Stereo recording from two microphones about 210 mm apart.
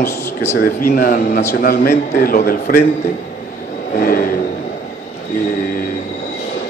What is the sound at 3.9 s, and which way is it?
Vehicle, 45° left (ahead or behind).